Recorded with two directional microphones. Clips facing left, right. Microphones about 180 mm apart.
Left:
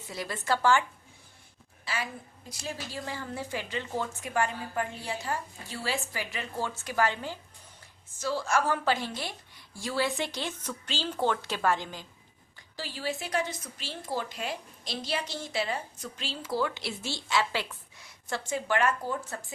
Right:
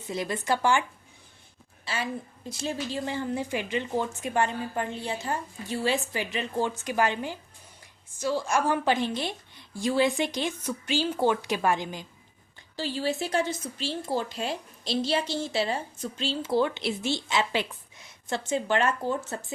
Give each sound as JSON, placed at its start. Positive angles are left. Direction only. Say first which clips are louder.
{"t": 0.1, "sound": "a woman's voice", "louder": "right 3 dB", "side_deg": -20}
{"t": 12.7, "sound": "a woman's voice", "louder": "right 6 dB", "side_deg": -30}